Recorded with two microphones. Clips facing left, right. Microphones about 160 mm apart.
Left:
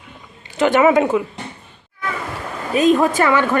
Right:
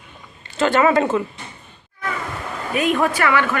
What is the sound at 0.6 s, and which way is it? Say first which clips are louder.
Speech: left 3 dB; 15° left (ahead or behind).